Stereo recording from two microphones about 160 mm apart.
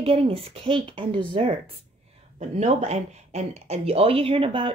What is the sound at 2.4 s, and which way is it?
Speech, 45° right (ahead or behind).